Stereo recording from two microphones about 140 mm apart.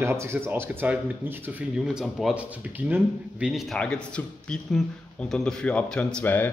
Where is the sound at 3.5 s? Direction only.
Centre (ahead or behind).